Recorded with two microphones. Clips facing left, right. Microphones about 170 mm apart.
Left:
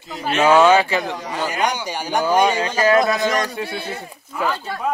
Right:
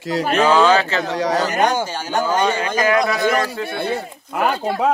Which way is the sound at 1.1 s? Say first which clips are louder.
Right 9 dB; 90° right.